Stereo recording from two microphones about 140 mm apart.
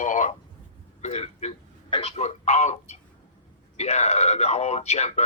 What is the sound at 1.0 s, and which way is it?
A man's voice, 55° left (ahead or behind).